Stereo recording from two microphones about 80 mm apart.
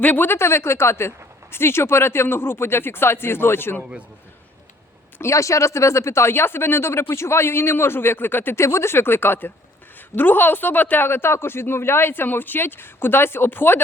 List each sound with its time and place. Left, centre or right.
0.0 s speech: left
5.2 s speech: left